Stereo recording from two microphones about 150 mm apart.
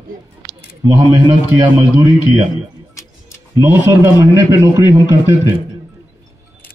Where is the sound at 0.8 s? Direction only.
25° right (ahead or behind).